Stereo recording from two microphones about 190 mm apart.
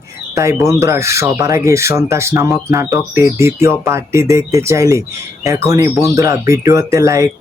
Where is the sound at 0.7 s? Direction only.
15° right (ahead or behind).